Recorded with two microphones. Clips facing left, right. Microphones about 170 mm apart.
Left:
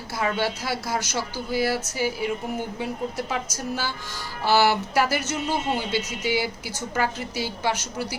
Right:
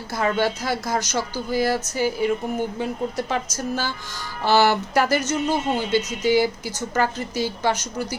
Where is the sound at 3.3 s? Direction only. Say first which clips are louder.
Right 3 dB; 10° left (ahead or behind).